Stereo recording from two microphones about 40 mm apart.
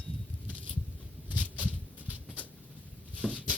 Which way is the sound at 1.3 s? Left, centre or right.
Left.